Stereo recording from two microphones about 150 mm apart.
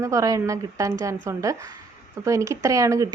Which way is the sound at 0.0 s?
20° right (ahead or behind).